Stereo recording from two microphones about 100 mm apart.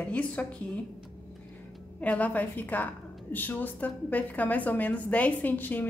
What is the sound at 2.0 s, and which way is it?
A woman's voice, 15° left (ahead or behind).